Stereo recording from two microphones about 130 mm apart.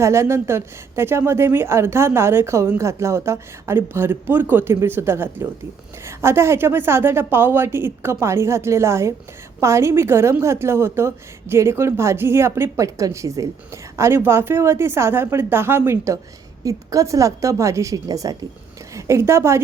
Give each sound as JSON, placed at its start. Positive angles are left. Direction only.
{"t": 0.0, "sound": "a woman's voice", "side_deg": -20}